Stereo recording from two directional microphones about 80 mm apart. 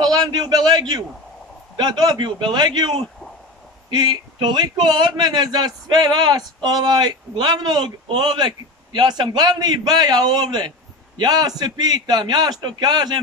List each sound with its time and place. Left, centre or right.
0.0 s a man's voice: right
3.9 s speech: right